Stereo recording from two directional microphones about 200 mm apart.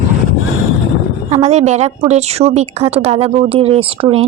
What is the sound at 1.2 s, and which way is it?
A woman's voice, 35° right (ahead or behind).